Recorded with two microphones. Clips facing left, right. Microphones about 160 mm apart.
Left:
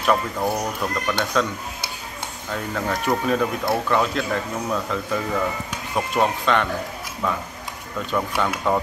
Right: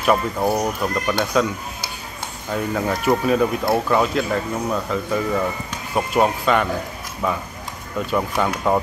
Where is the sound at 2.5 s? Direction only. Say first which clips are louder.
Right 4 dB; 10° right (ahead or behind).